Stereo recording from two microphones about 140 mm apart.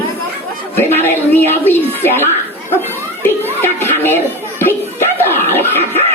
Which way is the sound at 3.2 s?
15° left (ahead or behind).